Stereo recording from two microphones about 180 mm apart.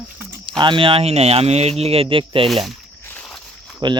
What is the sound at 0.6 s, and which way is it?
Speech, 25° right (ahead or behind).